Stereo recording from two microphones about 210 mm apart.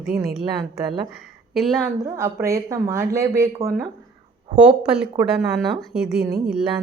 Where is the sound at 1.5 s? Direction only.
Centre (ahead or behind).